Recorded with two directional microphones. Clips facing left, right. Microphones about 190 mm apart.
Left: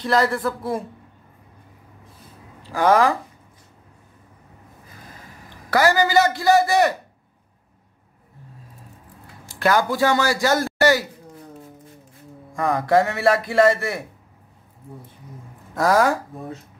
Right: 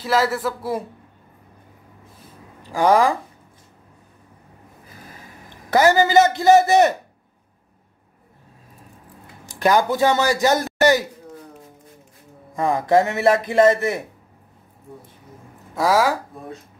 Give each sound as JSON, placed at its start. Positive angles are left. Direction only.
{"t": 0.0, "sound": "speech", "side_deg": -5}
{"t": 2.6, "sound": "speech", "side_deg": -15}
{"t": 5.7, "sound": "a man's voice", "side_deg": -20}
{"t": 9.5, "sound": "a man's voice", "side_deg": -15}
{"t": 12.5, "sound": "a man's voice", "side_deg": -20}
{"t": 15.7, "sound": "speech", "side_deg": -5}